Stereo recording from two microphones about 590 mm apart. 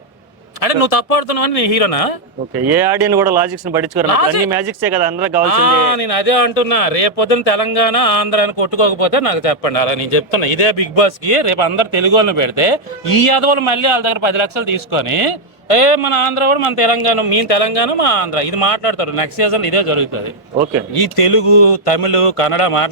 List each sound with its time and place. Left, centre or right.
0.6 s speech: left
3.3 s speech: centre
4.1 s speech: left
4.6 s speech: right
5.5 s speech: left